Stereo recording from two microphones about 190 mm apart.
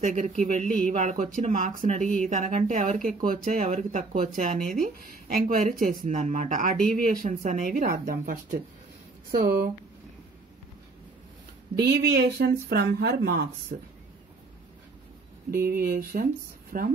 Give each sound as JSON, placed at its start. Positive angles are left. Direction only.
{"t": 0.0, "sound": "speech", "side_deg": -40}
{"t": 11.7, "sound": "speech", "side_deg": -60}
{"t": 15.5, "sound": "speech", "side_deg": -55}